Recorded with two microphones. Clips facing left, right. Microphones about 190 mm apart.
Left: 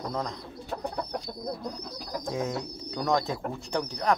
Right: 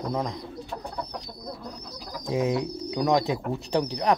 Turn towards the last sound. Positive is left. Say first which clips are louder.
# right 5 dB
turn(degrees=-20)  # may be behind; listen again after turning